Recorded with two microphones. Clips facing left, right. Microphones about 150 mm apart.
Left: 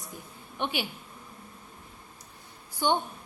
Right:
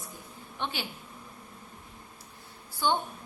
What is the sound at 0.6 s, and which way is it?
Speech, 15° left (ahead or behind).